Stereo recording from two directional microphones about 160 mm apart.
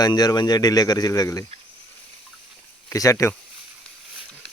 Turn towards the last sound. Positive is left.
turn(degrees=20)  # may be behind; listen again after turning